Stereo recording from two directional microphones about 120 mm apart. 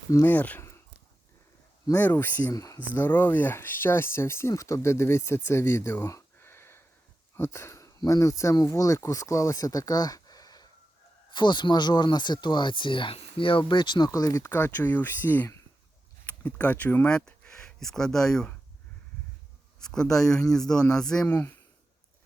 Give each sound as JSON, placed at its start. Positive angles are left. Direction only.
{"t": 0.3, "sound": "speech", "side_deg": 15}
{"t": 2.0, "sound": "speech", "side_deg": 15}
{"t": 2.5, "sound": "speech", "side_deg": 30}
{"t": 2.7, "sound": "speech", "side_deg": 15}
{"t": 19.8, "sound": "speech", "side_deg": 5}